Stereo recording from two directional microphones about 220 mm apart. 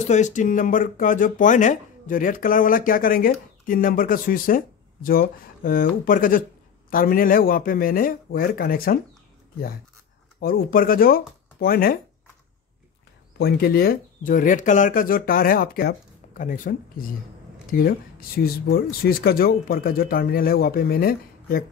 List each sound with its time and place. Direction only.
0.1 s speech: 35° left (ahead or behind)
10.4 s speech: 40° left (ahead or behind)
13.4 s speech: 45° left (ahead or behind)